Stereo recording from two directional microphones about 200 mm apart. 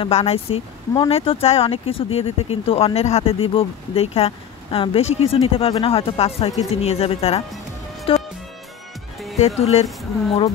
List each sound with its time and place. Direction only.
0.0 s speech: 30° left (ahead or behind)
8.1 s music: 30° left (ahead or behind)
9.6 s speech: 30° left (ahead or behind)